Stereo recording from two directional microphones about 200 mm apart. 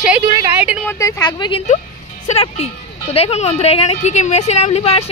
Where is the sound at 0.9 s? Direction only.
15° left (ahead or behind).